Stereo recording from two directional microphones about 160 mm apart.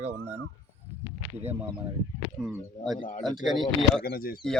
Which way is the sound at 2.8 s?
50° left (ahead or behind).